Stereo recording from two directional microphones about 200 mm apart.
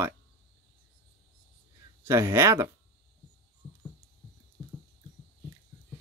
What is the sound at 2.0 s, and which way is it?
Speech, 10° right (ahead or behind).